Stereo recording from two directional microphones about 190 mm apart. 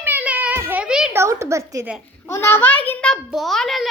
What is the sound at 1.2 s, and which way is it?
Speech, 15° right (ahead or behind).